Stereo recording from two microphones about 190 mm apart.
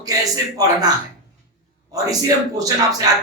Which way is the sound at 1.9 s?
20° right (ahead or behind).